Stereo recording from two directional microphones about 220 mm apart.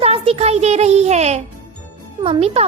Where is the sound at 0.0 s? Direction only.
25° right (ahead or behind).